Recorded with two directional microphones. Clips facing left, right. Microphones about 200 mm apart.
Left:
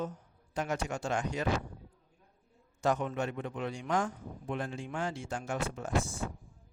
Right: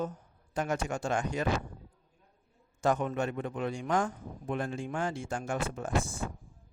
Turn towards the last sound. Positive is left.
turn(degrees=-55)  # may be behind; listen again after turning